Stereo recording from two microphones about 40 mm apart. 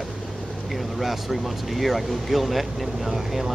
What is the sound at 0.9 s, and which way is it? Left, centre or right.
Speech, centre.